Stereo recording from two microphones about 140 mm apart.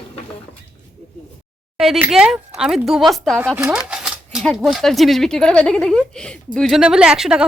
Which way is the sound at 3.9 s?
5° right (ahead or behind).